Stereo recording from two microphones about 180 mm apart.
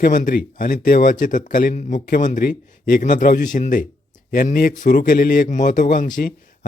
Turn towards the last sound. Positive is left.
turn(degrees=50)  # may be behind; listen again after turning